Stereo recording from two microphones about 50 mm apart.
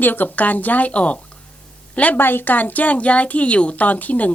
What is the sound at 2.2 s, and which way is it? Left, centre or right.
Speech, left.